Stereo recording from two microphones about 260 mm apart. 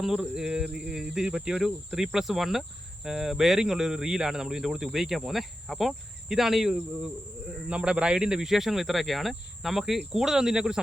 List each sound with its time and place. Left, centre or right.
0.0 s speech: centre